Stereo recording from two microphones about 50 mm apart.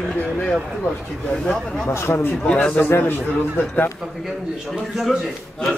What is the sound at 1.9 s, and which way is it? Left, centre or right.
Speech, left.